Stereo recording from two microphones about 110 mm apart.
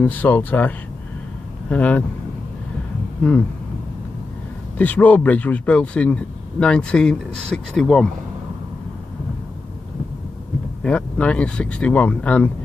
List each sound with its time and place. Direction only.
0.0 s speech: 15° left (ahead or behind)
4.7 s speech: 15° left (ahead or behind)
10.8 s speech: 10° left (ahead or behind)